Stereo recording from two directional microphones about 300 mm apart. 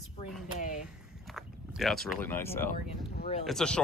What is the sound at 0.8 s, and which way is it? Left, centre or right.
Speech, centre.